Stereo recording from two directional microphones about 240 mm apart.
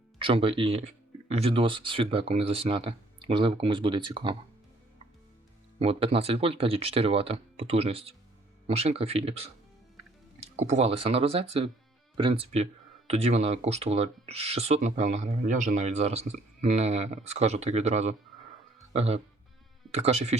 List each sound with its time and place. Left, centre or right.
0.2 s speech: right
5.8 s speech: right